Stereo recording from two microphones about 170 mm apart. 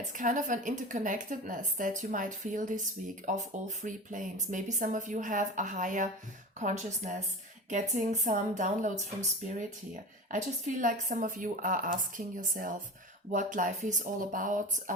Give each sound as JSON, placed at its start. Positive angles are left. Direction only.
{"t": 0.2, "sound": "a woman's voice", "side_deg": -50}
{"t": 9.9, "sound": "a woman's voice", "side_deg": -50}